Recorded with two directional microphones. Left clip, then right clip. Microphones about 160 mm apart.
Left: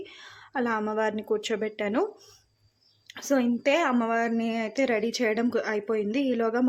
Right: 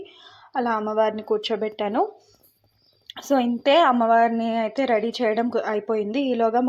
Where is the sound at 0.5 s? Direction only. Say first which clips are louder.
Right 4 dB; 30° left (ahead or behind).